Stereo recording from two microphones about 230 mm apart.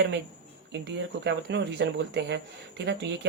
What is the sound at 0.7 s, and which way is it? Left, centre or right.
Speech, right.